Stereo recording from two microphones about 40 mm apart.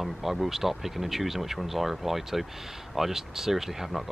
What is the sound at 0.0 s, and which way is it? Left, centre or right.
Speech, centre.